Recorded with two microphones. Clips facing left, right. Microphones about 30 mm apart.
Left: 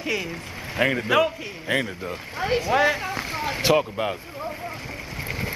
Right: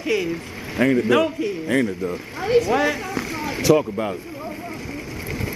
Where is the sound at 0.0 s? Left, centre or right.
Centre.